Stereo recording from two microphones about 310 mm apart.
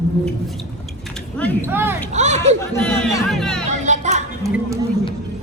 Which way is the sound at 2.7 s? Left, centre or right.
Centre.